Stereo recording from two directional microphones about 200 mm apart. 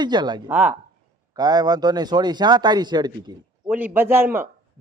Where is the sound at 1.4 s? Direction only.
20° right (ahead or behind).